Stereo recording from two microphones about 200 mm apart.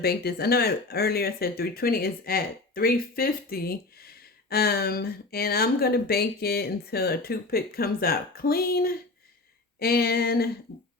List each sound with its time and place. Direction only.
0.0 s speech: 50° left (ahead or behind)